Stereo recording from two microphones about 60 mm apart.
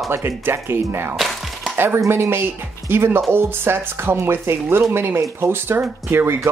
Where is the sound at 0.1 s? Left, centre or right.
Right.